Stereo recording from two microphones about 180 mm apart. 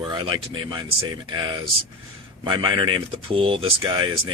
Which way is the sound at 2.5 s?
25° right (ahead or behind).